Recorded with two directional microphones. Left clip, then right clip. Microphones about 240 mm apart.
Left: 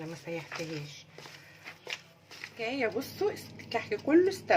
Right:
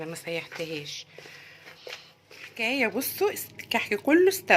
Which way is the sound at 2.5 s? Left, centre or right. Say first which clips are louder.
Right 6 dB; right.